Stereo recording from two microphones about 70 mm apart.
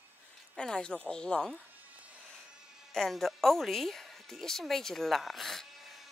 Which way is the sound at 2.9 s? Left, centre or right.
Centre.